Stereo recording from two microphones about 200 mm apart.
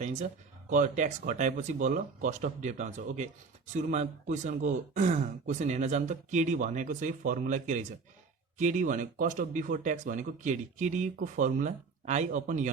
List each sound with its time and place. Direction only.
0.0 s speech: 35° right (ahead or behind)